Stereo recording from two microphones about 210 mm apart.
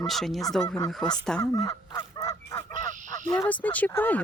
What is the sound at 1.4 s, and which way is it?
Honk, 15° left (ahead or behind).